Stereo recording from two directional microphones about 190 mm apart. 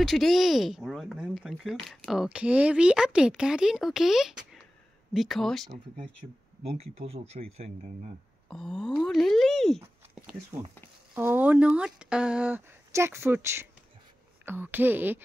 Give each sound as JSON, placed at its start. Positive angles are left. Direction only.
{"t": 0.0, "sound": "speech", "side_deg": 0}
{"t": 6.8, "sound": "speech", "side_deg": -30}
{"t": 8.5, "sound": "speech", "side_deg": 5}
{"t": 11.1, "sound": "speech", "side_deg": -10}